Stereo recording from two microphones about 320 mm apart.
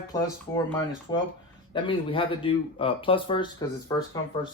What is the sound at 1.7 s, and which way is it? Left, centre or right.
Speech, centre.